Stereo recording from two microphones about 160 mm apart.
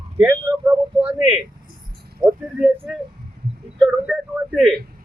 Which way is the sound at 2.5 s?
5° right (ahead or behind).